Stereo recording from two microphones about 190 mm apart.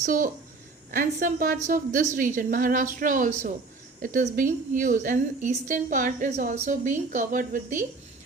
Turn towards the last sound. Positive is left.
turn(degrees=-45)  # may be behind; listen again after turning